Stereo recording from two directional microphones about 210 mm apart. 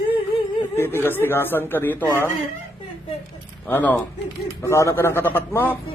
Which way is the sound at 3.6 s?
10° left (ahead or behind).